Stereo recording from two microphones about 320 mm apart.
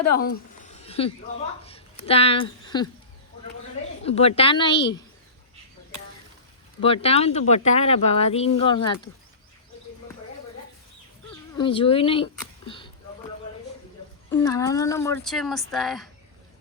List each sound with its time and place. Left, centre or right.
0.2 s a sound: left
1.6 s speech: centre
4.0 s speech: centre
6.8 s speech: centre
11.5 s speech: centre
14.3 s speech: centre